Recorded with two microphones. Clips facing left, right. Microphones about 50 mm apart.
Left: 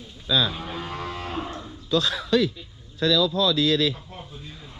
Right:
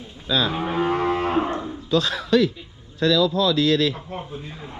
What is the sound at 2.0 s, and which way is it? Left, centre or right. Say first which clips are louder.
Speech: right 3 dB; right.